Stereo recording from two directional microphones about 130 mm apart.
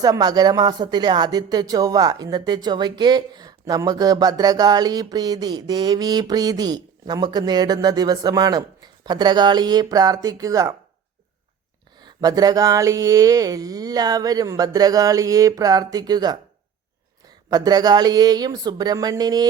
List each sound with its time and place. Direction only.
0.0 s speech: 30° right (ahead or behind)
12.0 s a sound: 30° right (ahead or behind)
17.5 s speech: 30° right (ahead or behind)